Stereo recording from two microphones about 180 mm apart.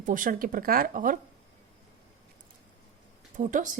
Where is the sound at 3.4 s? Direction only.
45° right (ahead or behind).